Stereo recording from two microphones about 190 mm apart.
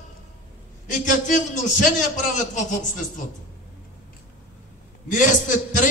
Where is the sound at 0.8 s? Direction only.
40° left (ahead or behind).